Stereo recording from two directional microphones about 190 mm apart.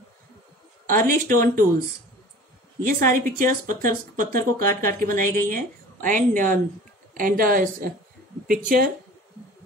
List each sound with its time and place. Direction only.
0.9 s speech: 45° right (ahead or behind)
2.9 s speech: 45° right (ahead or behind)